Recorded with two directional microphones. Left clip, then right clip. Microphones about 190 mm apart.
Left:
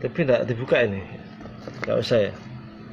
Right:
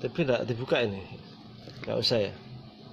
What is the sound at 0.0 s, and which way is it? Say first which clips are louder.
Speech: left 7 dB; 20° right (ahead or behind).